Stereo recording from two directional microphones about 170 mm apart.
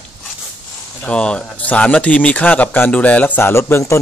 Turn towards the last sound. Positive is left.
turn(degrees=15)  # may be behind; listen again after turning